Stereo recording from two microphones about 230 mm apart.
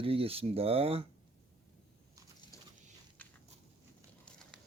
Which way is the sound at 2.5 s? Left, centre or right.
Centre.